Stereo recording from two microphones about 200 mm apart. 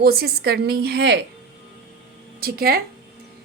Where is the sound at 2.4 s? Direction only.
50° right (ahead or behind).